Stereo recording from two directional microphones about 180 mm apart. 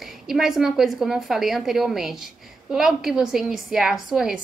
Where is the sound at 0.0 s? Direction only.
Centre (ahead or behind).